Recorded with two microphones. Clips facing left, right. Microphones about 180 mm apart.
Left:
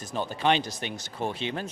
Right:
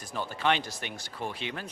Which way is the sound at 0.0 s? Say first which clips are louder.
Left 3 dB; 20° left (ahead or behind).